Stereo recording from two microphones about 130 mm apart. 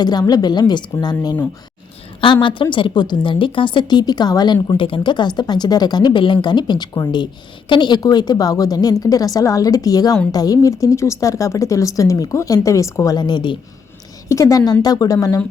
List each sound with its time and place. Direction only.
0.0 s speech: 30° left (ahead or behind)
14.3 s speech: 25° left (ahead or behind)